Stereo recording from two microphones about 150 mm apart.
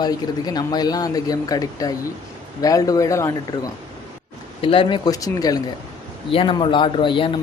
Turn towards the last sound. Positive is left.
turn(degrees=35)  # may be behind; listen again after turning